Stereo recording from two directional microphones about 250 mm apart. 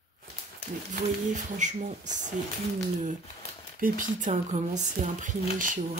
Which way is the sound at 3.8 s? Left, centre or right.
Right.